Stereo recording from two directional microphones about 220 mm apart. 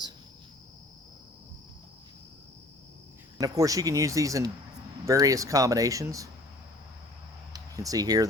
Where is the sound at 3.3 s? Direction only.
15° right (ahead or behind).